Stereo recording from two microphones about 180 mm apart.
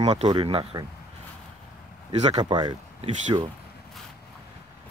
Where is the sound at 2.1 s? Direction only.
35° right (ahead or behind).